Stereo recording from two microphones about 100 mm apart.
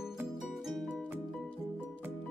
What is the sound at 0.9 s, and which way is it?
Music, 15° right (ahead or behind).